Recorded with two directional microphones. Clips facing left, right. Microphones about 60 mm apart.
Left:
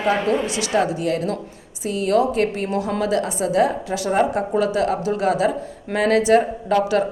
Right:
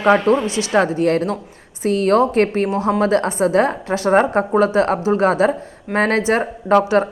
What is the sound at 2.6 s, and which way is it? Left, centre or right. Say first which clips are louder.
A woman's voice: right 4 dB; right.